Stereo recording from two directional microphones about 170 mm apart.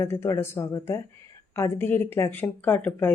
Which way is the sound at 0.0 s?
15° left (ahead or behind).